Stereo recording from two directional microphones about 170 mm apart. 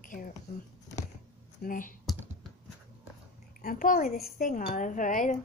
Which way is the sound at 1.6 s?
50° left (ahead or behind).